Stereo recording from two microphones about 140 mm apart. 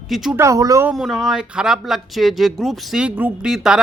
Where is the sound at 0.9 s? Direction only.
5° right (ahead or behind).